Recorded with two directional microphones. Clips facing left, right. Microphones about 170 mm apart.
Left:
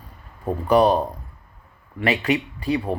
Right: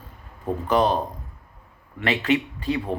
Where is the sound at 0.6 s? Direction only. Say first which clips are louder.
Left 4 dB; 10° left (ahead or behind).